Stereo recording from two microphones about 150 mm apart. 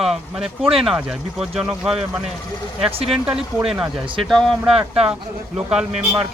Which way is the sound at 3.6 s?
5° right (ahead or behind).